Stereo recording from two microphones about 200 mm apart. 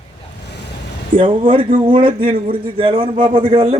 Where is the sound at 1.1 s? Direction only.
25° right (ahead or behind).